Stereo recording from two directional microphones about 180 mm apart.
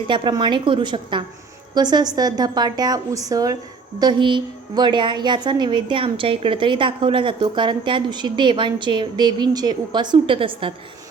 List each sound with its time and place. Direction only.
0.1 s a woman's voice: 25° right (ahead or behind)